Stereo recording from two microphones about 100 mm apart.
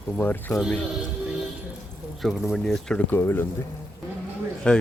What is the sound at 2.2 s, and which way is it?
Speech, centre (ahead or behind).